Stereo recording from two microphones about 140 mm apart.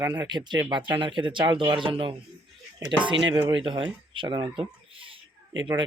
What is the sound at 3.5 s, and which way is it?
Speech, 40° right (ahead or behind).